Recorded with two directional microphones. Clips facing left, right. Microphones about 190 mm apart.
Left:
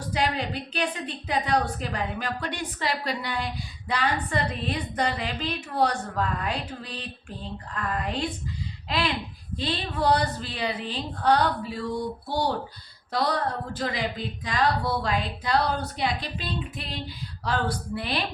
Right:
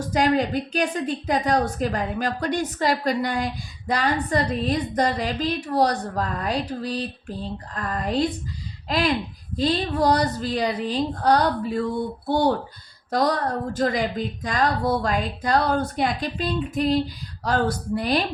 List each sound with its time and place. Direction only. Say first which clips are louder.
0.1 s a woman's voice: right 7 dB; 45° right (ahead or behind)